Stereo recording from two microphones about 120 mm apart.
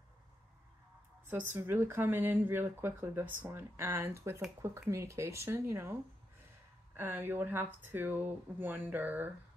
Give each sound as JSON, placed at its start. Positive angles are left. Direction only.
{"t": 1.2, "sound": "speech", "side_deg": -15}